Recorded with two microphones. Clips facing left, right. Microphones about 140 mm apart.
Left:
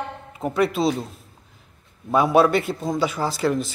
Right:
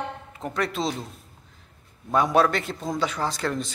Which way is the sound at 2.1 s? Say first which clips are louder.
Left 4 dB; 10° left (ahead or behind).